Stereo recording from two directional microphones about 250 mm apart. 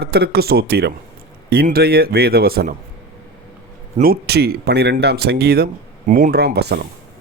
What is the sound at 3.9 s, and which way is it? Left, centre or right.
Speech, right.